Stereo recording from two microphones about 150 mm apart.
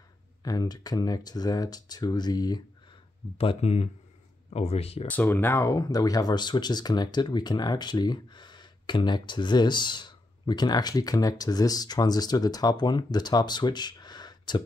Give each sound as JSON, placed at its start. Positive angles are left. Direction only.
{"t": 0.4, "sound": "speech", "side_deg": 25}
{"t": 3.3, "sound": "speech", "side_deg": 40}
{"t": 5.0, "sound": "speech", "side_deg": 10}